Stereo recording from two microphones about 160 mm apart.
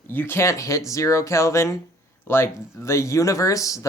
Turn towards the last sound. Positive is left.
turn(degrees=20)  # may be behind; listen again after turning